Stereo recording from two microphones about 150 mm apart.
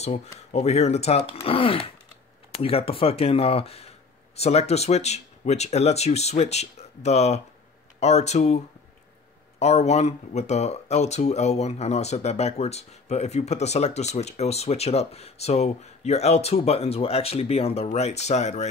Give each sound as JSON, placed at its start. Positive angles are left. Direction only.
{"t": 0.5, "sound": "speech", "side_deg": 45}
{"t": 9.6, "sound": "speech", "side_deg": 45}